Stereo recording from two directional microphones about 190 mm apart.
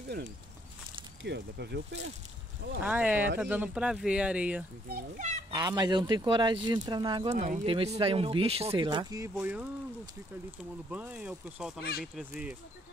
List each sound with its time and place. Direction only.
1.2 s speech: 65° right (ahead or behind)
2.8 s speech: 5° right (ahead or behind)
4.8 s a child's voice: 50° right (ahead or behind)
5.5 s speech: 20° right (ahead or behind)
10.9 s speech: 5° right (ahead or behind)